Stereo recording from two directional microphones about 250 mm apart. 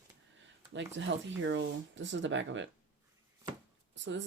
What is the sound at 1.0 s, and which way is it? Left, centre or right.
Speech, right.